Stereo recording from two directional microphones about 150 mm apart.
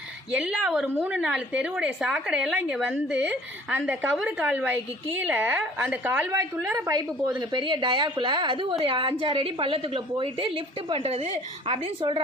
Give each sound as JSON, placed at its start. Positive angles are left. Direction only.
{"t": 0.3, "sound": "a woman's voice", "side_deg": -5}
{"t": 6.3, "sound": "a woman's voice", "side_deg": -20}